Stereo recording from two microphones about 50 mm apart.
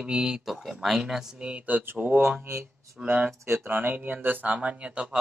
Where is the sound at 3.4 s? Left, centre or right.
Right.